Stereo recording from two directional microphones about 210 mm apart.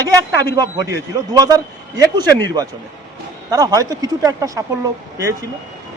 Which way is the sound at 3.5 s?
15° right (ahead or behind).